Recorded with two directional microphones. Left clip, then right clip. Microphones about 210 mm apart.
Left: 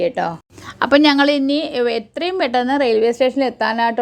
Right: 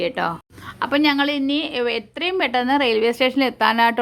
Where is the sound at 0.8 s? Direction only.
25° left (ahead or behind).